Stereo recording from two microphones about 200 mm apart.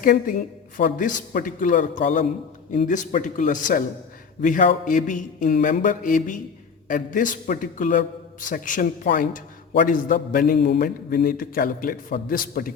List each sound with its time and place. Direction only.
0.0 s a man's voice: 45° left (ahead or behind)